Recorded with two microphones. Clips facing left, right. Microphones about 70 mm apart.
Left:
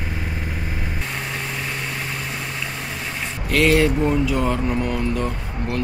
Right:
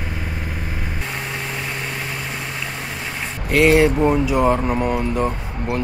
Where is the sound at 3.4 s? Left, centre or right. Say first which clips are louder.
Right 3 dB; right.